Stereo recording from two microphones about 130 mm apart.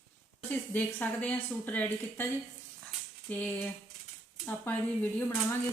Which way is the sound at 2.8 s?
15° left (ahead or behind).